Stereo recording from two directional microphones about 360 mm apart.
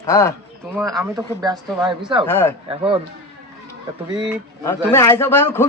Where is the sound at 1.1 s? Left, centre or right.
Centre.